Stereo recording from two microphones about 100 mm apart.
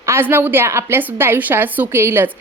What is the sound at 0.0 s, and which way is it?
A woman's voice, 25° right (ahead or behind).